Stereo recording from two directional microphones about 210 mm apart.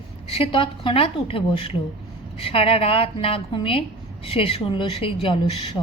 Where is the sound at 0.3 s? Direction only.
25° left (ahead or behind).